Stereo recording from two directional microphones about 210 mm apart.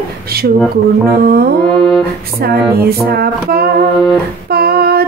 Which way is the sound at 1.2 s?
45° right (ahead or behind).